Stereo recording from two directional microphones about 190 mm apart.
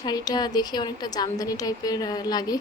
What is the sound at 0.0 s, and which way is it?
A woman's voice, 20° left (ahead or behind).